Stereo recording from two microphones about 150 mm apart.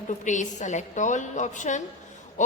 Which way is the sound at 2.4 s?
55° left (ahead or behind).